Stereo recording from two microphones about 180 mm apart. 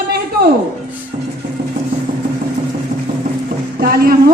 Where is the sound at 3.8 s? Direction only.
60° right (ahead or behind).